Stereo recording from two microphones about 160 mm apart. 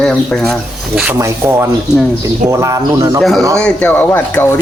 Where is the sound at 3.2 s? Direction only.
Centre (ahead or behind).